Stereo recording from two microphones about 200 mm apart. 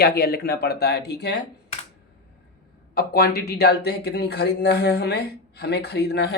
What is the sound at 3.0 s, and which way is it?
Speech, 50° left (ahead or behind).